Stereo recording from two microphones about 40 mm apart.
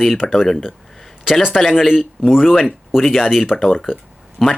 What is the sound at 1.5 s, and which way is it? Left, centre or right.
Speech, centre.